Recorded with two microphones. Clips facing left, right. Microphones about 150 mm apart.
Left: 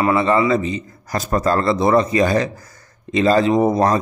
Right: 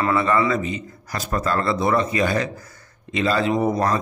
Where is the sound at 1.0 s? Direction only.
40° left (ahead or behind).